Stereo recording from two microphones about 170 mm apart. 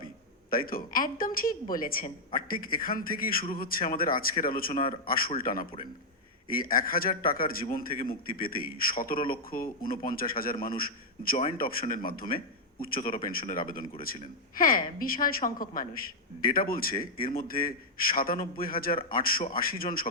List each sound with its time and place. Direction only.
0.5 s a man's voice: 55° left (ahead or behind)